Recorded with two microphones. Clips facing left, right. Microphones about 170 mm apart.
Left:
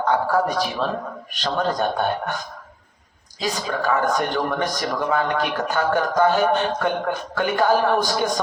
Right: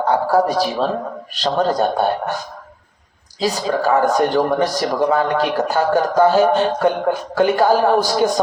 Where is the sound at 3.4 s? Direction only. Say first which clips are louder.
Right 6 dB; 35° right (ahead or behind).